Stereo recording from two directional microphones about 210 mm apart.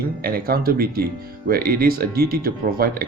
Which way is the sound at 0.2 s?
45° right (ahead or behind).